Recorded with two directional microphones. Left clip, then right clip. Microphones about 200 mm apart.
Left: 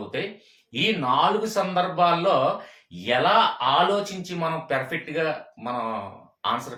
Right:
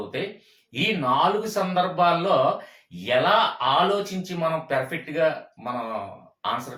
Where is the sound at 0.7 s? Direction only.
15° left (ahead or behind).